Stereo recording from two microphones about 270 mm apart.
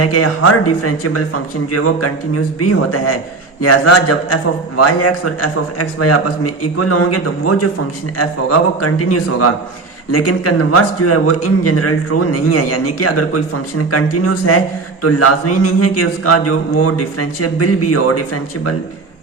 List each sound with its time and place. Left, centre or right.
0.0 s a man's voice: left